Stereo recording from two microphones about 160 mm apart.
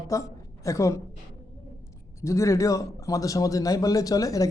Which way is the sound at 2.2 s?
20° left (ahead or behind).